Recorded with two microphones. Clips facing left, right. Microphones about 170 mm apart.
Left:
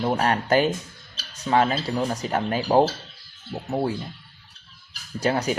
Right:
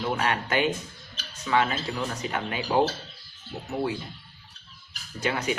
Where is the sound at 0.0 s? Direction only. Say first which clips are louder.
Left 4 dB; 35° left (ahead or behind).